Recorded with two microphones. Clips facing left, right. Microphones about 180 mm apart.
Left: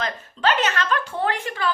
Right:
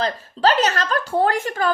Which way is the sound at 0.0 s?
35° right (ahead or behind).